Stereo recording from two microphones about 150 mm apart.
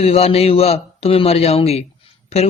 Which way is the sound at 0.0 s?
40° left (ahead or behind).